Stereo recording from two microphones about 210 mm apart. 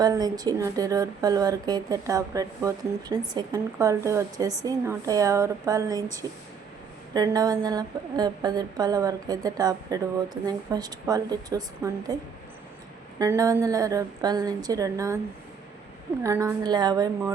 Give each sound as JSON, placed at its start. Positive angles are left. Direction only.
{"t": 0.0, "sound": "speech", "side_deg": -20}
{"t": 13.1, "sound": "speech", "side_deg": -15}
{"t": 16.2, "sound": "speech", "side_deg": -15}